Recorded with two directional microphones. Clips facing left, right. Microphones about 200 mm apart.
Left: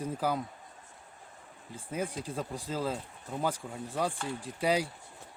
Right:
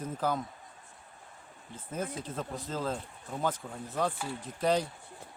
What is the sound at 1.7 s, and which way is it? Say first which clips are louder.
Speech: left 1 dB; 10° left (ahead or behind).